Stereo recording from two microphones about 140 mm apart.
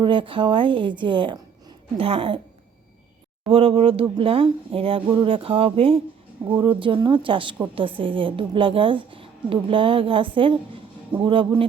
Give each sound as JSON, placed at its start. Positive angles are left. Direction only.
{"t": 0.0, "sound": "a woman's voice", "side_deg": -35}
{"t": 3.5, "sound": "a woman's voice", "side_deg": -40}